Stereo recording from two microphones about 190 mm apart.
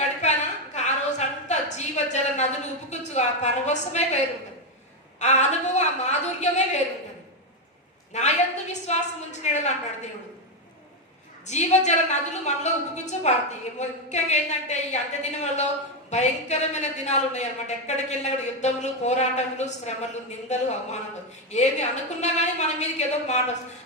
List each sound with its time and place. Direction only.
0.0 s a sound: 35° left (ahead or behind)
5.2 s a woman's voice: 35° left (ahead or behind)
8.1 s a woman's voice: 35° left (ahead or behind)
11.4 s a woman's voice: 35° left (ahead or behind)